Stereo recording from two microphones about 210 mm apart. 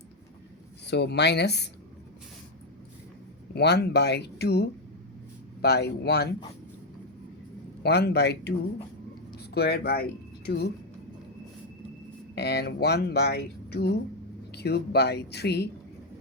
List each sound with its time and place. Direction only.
0.9 s speech: 55° left (ahead or behind)
3.5 s speech: 50° left (ahead or behind)
7.9 s speech: 50° left (ahead or behind)
12.3 s speech: 50° left (ahead or behind)